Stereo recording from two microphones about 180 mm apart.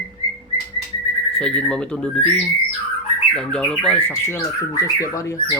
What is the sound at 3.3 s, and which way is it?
Speech, 5° left (ahead or behind).